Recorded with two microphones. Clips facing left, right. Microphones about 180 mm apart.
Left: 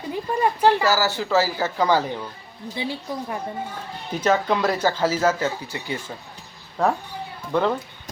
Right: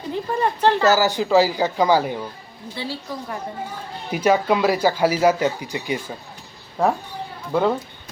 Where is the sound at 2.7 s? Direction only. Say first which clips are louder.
Left 1 dB; 15° left (ahead or behind).